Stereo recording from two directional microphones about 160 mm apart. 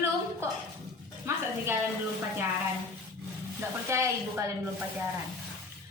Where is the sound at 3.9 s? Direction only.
20° right (ahead or behind).